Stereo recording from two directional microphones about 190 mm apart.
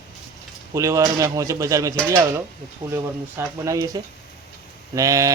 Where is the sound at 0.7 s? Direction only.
15° right (ahead or behind).